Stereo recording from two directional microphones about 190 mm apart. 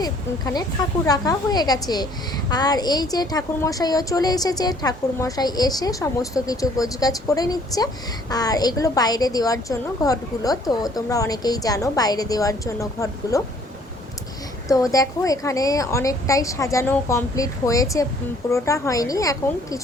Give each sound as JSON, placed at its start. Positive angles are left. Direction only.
{"t": 0.0, "sound": "a woman's voice", "side_deg": 20}
{"t": 14.8, "sound": "a woman's voice", "side_deg": 20}